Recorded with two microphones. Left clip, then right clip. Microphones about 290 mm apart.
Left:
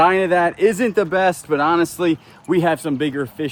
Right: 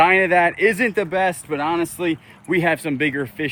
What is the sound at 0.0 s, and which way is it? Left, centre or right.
Speech, centre.